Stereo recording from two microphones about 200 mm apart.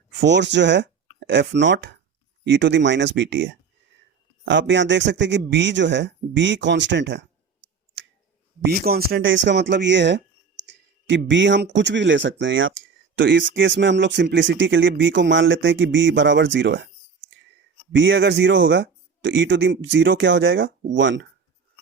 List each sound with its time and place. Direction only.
0.2 s speech: 60° right (ahead or behind)
8.6 s speech: 50° right (ahead or behind)
9.2 s speech: 70° right (ahead or behind)
17.9 s speech: 70° right (ahead or behind)